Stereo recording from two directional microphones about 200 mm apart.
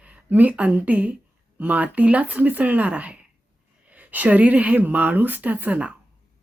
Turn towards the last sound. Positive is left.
turn(degrees=-5)  # may be behind; listen again after turning